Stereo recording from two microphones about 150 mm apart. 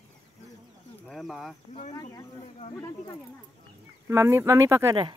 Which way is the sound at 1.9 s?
20° left (ahead or behind).